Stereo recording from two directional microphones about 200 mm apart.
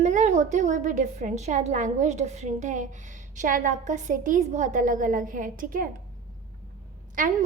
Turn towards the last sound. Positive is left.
turn(degrees=-40)  # may be behind; listen again after turning